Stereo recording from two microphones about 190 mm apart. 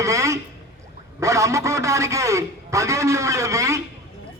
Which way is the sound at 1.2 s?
15° right (ahead or behind).